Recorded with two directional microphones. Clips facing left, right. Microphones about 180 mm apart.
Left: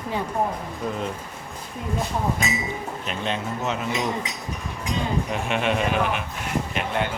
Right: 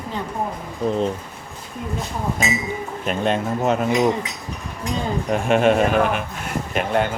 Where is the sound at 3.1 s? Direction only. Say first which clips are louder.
Right 8 dB; 50° right (ahead or behind).